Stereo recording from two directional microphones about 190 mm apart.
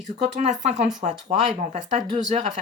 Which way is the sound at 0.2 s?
40° right (ahead or behind).